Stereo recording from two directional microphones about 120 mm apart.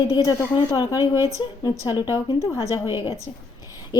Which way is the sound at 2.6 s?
20° right (ahead or behind).